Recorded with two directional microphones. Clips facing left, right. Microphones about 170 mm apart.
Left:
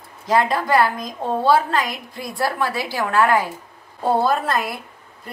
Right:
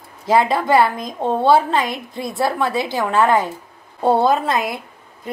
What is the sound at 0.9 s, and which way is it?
A woman's voice, 25° right (ahead or behind).